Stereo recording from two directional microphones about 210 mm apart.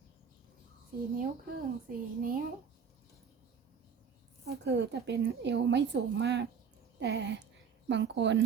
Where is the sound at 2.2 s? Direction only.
40° right (ahead or behind).